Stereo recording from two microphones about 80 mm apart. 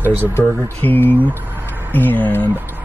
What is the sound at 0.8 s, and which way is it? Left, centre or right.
Speech, left.